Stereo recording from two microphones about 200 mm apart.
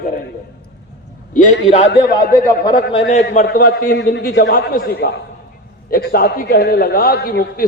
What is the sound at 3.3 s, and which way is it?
A man's voice, 45° left (ahead or behind).